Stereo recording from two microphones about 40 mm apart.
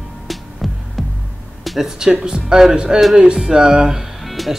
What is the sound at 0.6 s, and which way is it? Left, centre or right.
Music, centre.